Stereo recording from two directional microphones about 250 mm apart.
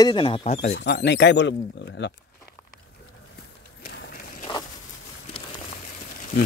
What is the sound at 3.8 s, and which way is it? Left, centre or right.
Run, left.